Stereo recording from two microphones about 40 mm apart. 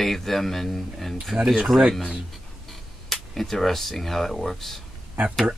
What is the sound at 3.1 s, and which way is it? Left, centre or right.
Speech, centre.